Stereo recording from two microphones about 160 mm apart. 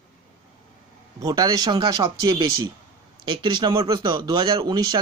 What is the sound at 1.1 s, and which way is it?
Speech, 25° right (ahead or behind).